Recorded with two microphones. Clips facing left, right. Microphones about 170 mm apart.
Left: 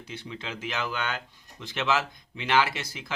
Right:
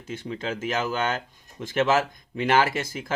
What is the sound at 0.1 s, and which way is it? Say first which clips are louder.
Speech: right 7 dB; 45° right (ahead or behind).